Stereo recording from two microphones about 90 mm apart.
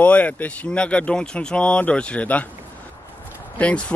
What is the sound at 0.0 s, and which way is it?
Speech, 15° left (ahead or behind).